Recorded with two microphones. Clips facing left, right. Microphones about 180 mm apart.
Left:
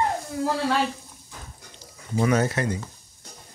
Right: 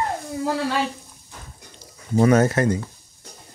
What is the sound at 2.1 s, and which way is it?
Speech, 45° right (ahead or behind).